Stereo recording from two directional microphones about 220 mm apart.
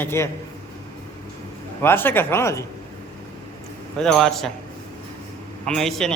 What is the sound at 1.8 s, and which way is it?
Speech, 10° left (ahead or behind).